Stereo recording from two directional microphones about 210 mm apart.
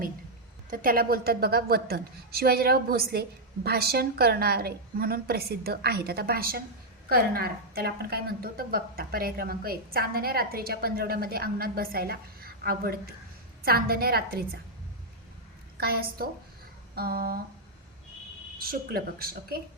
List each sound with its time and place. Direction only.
0.7 s a woman's voice: 40° right (ahead or behind)
15.8 s a woman's voice: 45° right (ahead or behind)
18.6 s a woman's voice: 45° right (ahead or behind)